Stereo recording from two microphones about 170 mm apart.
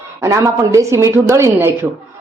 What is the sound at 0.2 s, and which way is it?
Speech, 20° right (ahead or behind).